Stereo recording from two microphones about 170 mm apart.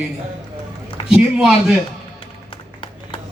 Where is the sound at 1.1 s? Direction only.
5° right (ahead or behind).